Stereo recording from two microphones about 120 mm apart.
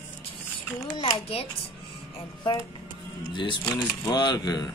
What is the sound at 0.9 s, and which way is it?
Speech, 30° left (ahead or behind).